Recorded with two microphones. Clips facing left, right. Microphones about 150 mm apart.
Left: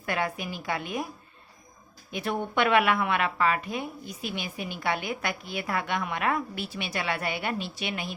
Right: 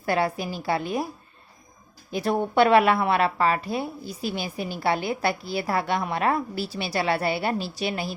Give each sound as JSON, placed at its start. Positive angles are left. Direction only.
{"t": 0.0, "sound": "a woman's voice", "side_deg": -35}
{"t": 2.0, "sound": "a woman's voice", "side_deg": -35}